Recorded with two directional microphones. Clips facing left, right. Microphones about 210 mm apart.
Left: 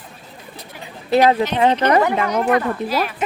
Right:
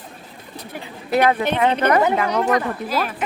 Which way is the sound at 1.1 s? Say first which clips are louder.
Left 3 dB; 25° left (ahead or behind).